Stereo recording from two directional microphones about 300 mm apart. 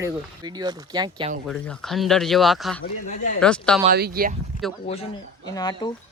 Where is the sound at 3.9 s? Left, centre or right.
Right.